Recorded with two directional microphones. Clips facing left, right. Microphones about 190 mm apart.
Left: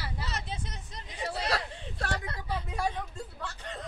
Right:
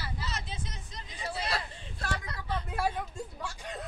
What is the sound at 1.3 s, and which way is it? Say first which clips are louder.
Chatter: left 2 dB; 75° left (ahead or behind).